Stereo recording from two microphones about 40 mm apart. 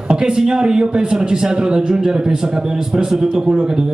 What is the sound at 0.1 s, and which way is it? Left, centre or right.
A man's voice, centre.